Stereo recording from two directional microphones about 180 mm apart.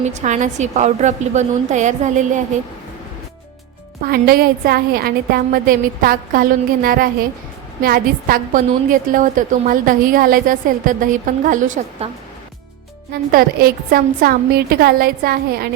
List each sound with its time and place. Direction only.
0.0 s a woman's voice: 40° right (ahead or behind)
4.0 s a woman's voice: 55° right (ahead or behind)
13.3 s a woman's voice: 55° right (ahead or behind)